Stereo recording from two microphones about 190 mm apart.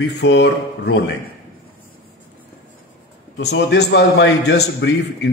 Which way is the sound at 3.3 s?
60° left (ahead or behind).